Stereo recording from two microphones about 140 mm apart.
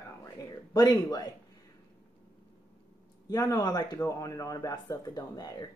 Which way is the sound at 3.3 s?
30° left (ahead or behind).